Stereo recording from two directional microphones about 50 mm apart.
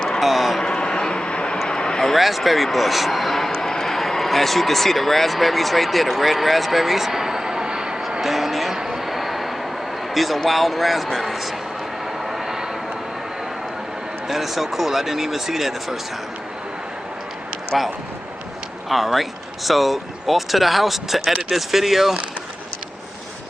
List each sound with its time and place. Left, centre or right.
0.2 s speech: centre
0.6 s a sound: centre
1.6 s a man's voice: centre
8.2 s a sound: centre
10.1 s speech: centre
12.1 s vehicle: centre
14.3 s speech: centre
17.7 s speech: centre